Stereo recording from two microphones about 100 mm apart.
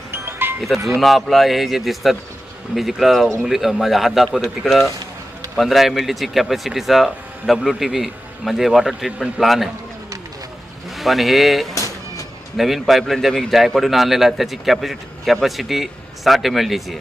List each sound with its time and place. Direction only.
0.1 s music: 20° right (ahead or behind)
0.9 s a man's voice: centre (ahead or behind)
10.9 s a man's voice: centre (ahead or behind)